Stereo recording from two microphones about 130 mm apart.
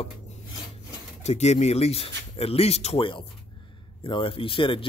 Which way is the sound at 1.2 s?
55° left (ahead or behind).